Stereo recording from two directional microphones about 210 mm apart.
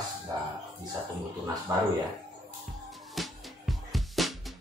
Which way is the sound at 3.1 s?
Centre (ahead or behind).